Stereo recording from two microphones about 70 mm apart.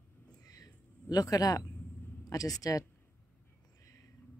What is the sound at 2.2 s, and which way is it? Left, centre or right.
Speech, left.